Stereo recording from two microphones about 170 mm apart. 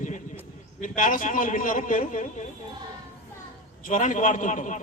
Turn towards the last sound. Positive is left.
turn(degrees=45)  # may be behind; listen again after turning